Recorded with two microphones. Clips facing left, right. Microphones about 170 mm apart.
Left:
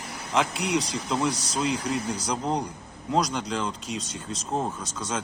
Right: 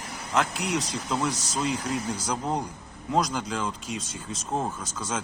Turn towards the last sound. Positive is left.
turn(degrees=0)  # may be behind; listen again after turning